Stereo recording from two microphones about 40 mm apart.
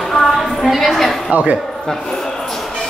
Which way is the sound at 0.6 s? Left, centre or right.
Centre.